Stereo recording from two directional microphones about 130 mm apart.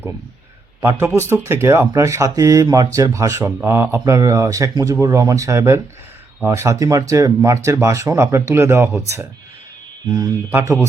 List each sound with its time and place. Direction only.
0.8 s a man's voice: 20° right (ahead or behind)
10.5 s a man's voice: 15° right (ahead or behind)